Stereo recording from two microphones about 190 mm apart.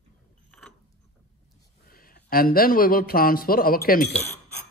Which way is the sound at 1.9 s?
50° left (ahead or behind).